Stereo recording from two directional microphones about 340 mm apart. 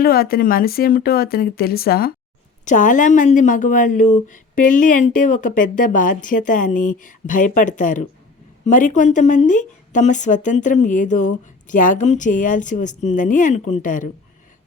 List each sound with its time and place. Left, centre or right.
0.0 s speech: left